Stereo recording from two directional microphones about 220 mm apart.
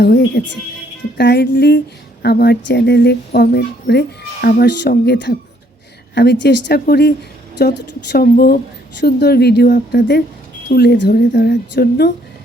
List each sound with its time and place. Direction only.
0.0 s speech: 50° left (ahead or behind)